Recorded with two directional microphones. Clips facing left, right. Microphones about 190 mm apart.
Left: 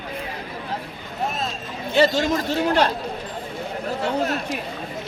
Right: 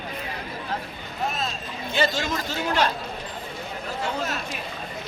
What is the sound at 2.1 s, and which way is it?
Speech, 60° left (ahead or behind).